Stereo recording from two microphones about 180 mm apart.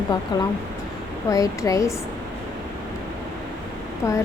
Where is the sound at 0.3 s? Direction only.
25° left (ahead or behind).